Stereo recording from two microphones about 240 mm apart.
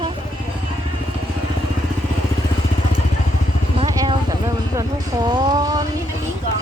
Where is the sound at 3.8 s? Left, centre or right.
Centre.